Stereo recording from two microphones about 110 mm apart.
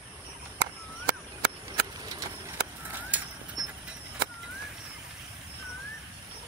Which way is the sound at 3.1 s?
15° right (ahead or behind).